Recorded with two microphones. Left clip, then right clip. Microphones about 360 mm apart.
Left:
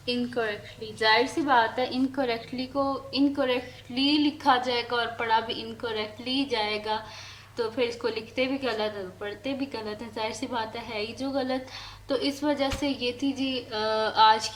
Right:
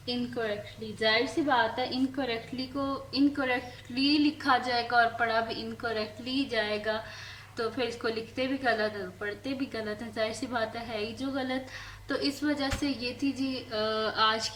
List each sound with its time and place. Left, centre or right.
0.0 s a woman's voice: centre